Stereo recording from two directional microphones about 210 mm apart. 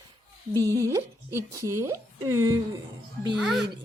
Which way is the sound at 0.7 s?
15° right (ahead or behind).